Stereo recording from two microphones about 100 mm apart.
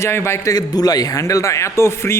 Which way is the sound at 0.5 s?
40° left (ahead or behind).